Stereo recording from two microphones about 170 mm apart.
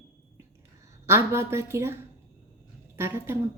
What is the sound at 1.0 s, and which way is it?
A woman's voice, 15° right (ahead or behind).